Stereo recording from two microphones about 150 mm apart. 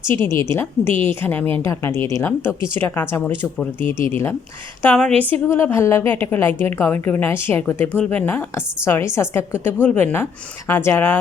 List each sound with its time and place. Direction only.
0.2 s a woman's voice: 20° left (ahead or behind)